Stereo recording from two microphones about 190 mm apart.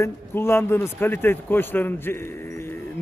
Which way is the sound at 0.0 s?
15° left (ahead or behind).